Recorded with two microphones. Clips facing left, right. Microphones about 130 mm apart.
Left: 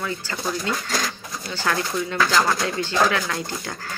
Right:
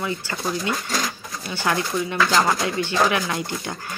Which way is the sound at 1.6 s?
20° right (ahead or behind).